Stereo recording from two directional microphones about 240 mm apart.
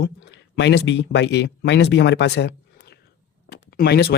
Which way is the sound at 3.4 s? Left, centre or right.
Left.